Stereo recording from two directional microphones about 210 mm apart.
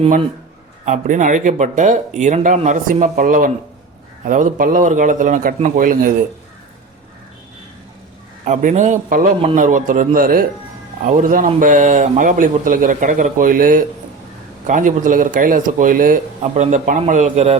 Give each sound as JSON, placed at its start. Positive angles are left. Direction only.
{"t": 0.9, "sound": "speech", "side_deg": -35}
{"t": 8.4, "sound": "speech", "side_deg": -35}